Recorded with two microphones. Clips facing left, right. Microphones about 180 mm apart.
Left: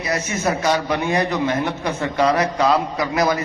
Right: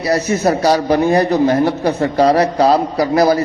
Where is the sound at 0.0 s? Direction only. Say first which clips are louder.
Right 7 dB; 35° right (ahead or behind).